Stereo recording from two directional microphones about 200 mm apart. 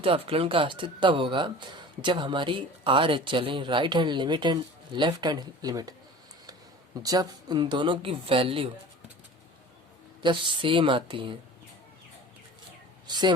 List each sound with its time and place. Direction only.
0.0 s speech: 30° right (ahead or behind)
7.0 s speech: 20° right (ahead or behind)
10.2 s speech: 25° right (ahead or behind)
13.1 s speech: 20° right (ahead or behind)